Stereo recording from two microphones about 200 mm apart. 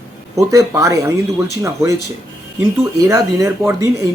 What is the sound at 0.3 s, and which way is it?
Speech, 15° right (ahead or behind).